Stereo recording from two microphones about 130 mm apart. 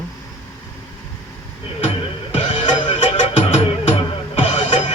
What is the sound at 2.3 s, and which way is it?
Music, 40° left (ahead or behind).